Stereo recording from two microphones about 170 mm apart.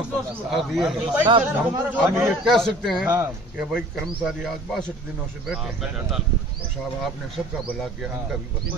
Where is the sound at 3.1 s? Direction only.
10° right (ahead or behind).